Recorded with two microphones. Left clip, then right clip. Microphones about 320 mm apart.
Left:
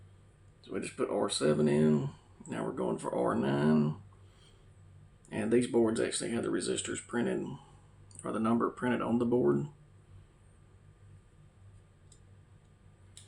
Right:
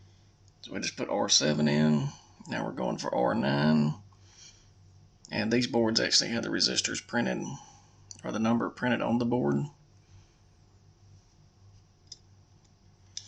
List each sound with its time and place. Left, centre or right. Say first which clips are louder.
0.9 s speech: right 5 dB; right
5.3 s speech: right 1 dB; right